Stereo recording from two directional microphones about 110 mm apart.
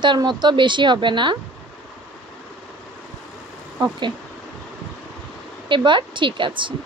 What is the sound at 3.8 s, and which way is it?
Speech, 45° right (ahead or behind).